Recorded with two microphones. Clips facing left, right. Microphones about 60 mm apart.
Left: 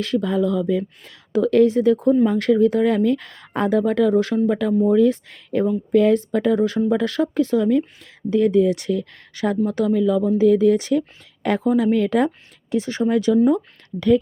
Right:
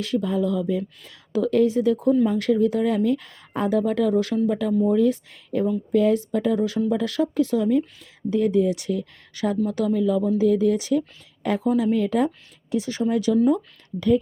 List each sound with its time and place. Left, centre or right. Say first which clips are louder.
0.0 s speech: left 3 dB; left
4.1 s speech: left 3 dB; left
9.3 s speech: left 3 dB; left
11.6 s speech: left 3 dB; left
11.9 s speech: left 3 dB; left
12.7 s speech: left 3 dB; left